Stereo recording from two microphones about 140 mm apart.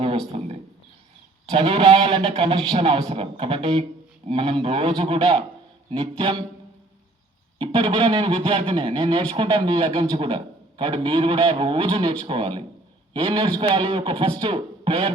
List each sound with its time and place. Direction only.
0.3 s a man's voice: 45° right (ahead or behind)
7.6 s a man's voice: 40° right (ahead or behind)